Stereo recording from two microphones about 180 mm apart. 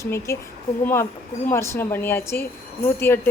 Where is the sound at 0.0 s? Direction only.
15° left (ahead or behind).